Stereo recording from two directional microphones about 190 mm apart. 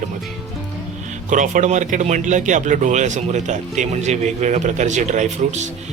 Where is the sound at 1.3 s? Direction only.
40° right (ahead or behind).